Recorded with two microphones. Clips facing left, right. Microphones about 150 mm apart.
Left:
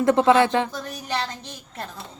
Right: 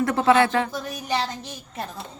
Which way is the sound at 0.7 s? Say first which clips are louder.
Right 2 dB; 10° right (ahead or behind).